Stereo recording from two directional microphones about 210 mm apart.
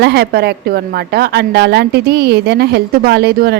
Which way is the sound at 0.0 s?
50° right (ahead or behind).